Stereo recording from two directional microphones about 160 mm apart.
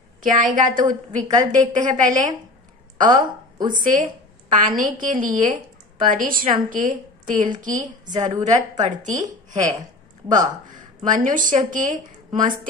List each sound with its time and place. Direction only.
0.2 s a woman's voice: 55° right (ahead or behind)
1.2 s a woman's voice: 20° right (ahead or behind)
1.5 s speech: 50° right (ahead or behind)
3.1 s speech: 25° right (ahead or behind)
3.7 s a woman's voice: 55° right (ahead or behind)
9.8 s a sound: 25° right (ahead or behind)
11.1 s a woman's voice: 55° right (ahead or behind)